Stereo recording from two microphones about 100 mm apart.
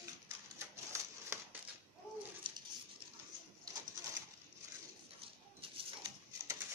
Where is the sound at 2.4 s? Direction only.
55° right (ahead or behind).